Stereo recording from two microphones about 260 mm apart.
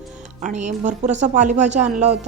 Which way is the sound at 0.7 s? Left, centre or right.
Right.